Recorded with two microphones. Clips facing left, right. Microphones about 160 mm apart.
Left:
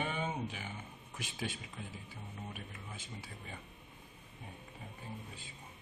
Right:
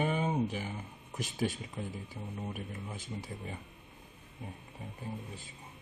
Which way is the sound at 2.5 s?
40° right (ahead or behind).